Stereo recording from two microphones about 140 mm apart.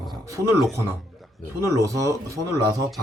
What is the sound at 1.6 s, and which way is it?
Speech, 20° right (ahead or behind).